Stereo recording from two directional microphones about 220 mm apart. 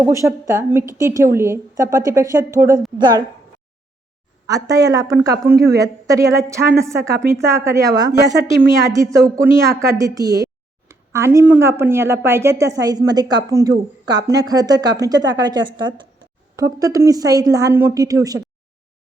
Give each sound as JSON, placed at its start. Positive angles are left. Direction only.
{"t": 0.0, "sound": "a woman's voice", "side_deg": -15}
{"t": 4.4, "sound": "a woman's voice", "side_deg": -15}